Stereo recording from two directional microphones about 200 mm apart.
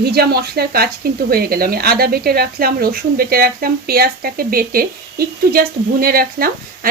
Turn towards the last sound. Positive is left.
turn(degrees=-50)  # may be behind; listen again after turning